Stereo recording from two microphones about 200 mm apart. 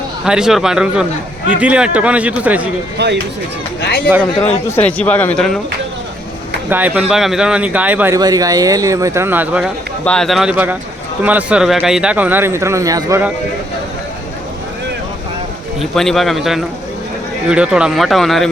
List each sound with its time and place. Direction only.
0.3 s speech: 5° right (ahead or behind)
3.0 s speech: 55° right (ahead or behind)
3.8 s speech: 60° left (ahead or behind)
4.7 s speech: 5° left (ahead or behind)
6.7 s speech: 10° right (ahead or behind)
10.0 s speech: 5° left (ahead or behind); by 13.3 s 15° right (ahead or behind)
15.8 s speech: centre (ahead or behind)